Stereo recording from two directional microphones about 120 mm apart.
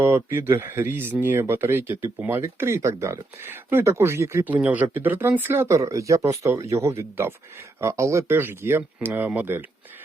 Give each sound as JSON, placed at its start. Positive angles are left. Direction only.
{"t": 0.0, "sound": "speech", "side_deg": -20}